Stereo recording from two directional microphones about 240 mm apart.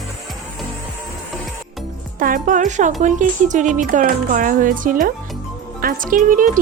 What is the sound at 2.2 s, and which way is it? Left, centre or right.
Speech, right.